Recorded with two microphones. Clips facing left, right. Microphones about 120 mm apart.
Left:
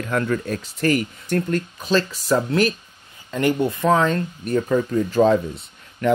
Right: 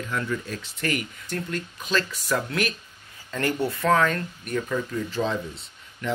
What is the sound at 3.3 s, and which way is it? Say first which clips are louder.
Speech: left 6 dB; 20° left (ahead or behind).